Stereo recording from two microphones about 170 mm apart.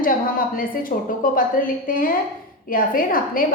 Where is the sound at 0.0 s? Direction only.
55° left (ahead or behind).